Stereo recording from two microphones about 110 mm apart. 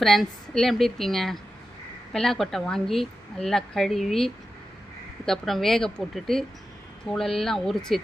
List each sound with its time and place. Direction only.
0.0 s a woman's voice: centre (ahead or behind)